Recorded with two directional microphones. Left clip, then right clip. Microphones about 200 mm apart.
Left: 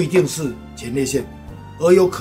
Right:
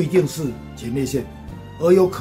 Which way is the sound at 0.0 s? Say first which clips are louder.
Left 2 dB; 10° left (ahead or behind).